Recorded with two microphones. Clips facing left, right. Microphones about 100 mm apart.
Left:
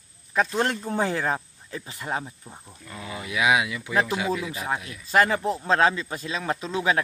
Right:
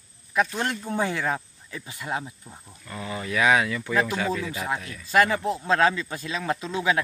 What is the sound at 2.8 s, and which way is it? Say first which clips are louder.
Speech: right 3 dB; 5° left (ahead or behind).